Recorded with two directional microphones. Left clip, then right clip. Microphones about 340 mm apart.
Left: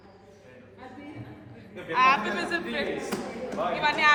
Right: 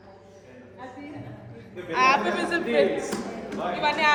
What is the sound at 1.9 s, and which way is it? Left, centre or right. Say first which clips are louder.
Speech: right 1 dB; centre.